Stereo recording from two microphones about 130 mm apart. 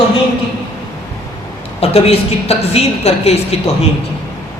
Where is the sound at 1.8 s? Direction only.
50° left (ahead or behind).